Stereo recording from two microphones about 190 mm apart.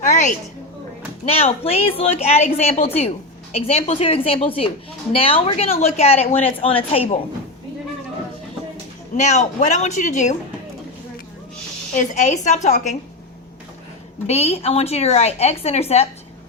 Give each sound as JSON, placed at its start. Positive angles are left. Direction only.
{"t": 0.0, "sound": "a sound", "side_deg": 40}
{"t": 1.2, "sound": "a woman's voice", "side_deg": 30}
{"t": 9.1, "sound": "a woman's voice", "side_deg": 35}
{"t": 11.9, "sound": "a woman's voice", "side_deg": 40}
{"t": 14.3, "sound": "a woman's voice", "side_deg": 35}